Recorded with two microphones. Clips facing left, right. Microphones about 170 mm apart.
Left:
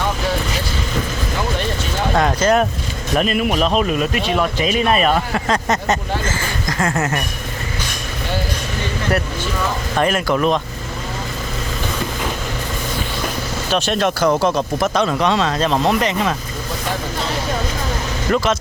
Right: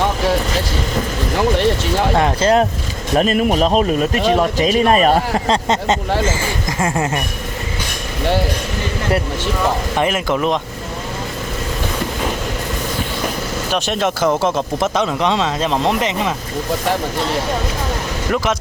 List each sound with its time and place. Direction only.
2.1 s a man's voice: 25° right (ahead or behind)
6.8 s speech: 10° right (ahead or behind)
10.0 s speech: 20° right (ahead or behind)
13.7 s speech: 20° right (ahead or behind)
18.3 s speech: 15° right (ahead or behind)